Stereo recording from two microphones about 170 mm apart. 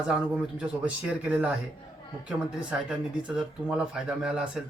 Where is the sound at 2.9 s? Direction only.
5° right (ahead or behind).